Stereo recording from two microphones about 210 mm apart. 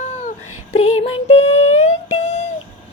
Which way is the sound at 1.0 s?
25° left (ahead or behind).